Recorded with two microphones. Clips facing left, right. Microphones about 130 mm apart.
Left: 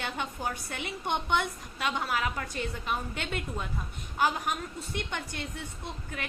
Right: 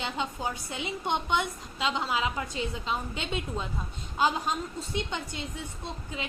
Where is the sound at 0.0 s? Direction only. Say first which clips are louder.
Right 2 dB; 15° right (ahead or behind).